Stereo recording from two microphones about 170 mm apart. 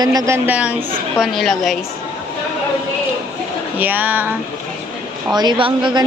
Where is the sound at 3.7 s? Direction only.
10° right (ahead or behind).